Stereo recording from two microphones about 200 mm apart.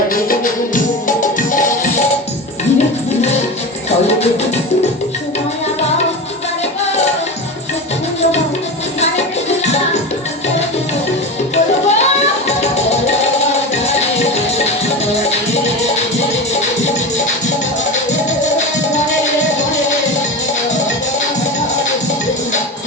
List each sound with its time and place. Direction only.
1.0 s music: 40° left (ahead or behind)
11.5 s music: 35° left (ahead or behind)
18.4 s music: 35° left (ahead or behind)